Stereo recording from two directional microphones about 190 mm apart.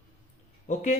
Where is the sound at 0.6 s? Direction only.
35° left (ahead or behind).